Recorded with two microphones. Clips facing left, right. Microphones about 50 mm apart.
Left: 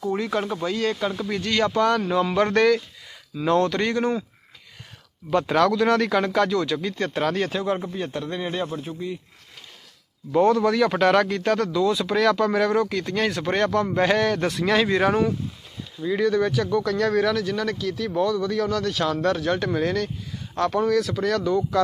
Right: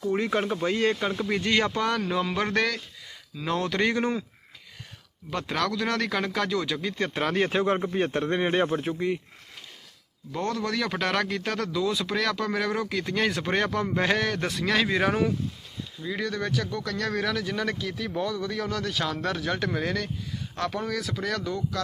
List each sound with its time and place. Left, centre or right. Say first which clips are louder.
0.5 s speech: even; right
1.8 s speech: left 6 dB; centre
5.3 s speech: left 8 dB; centre
7.3 s speech: even; right
7.9 s a man's voice: right 3 dB; right
8.8 s speech: right 3 dB; right
10.4 s speech: left 9 dB; centre
17.4 s speech: left 4 dB; centre